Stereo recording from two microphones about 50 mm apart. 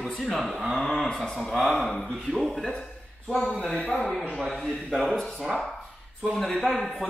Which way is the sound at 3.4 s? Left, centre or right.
Left.